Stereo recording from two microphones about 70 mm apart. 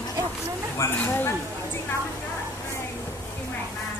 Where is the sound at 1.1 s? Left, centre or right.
Left.